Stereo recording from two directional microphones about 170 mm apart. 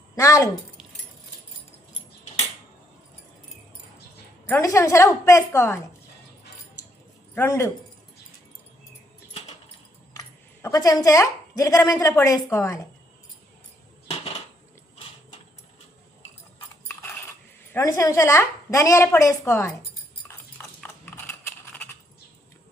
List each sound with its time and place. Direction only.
0.2 s speech: 20° left (ahead or behind)
4.4 s a woman's voice: 15° left (ahead or behind)
7.3 s a woman's voice: 15° left (ahead or behind)
10.2 s speech: 20° left (ahead or behind)
17.7 s a woman's voice: 15° left (ahead or behind)
20.2 s a sound: 10° left (ahead or behind)